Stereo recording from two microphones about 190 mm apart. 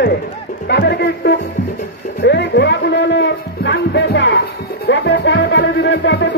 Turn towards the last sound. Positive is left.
turn(degrees=65)  # may be behind; listen again after turning